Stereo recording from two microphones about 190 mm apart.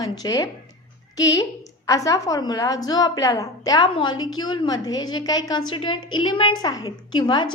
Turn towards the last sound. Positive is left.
turn(degrees=25)  # may be behind; listen again after turning